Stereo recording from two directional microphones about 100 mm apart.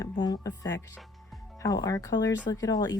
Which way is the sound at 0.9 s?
Centre (ahead or behind).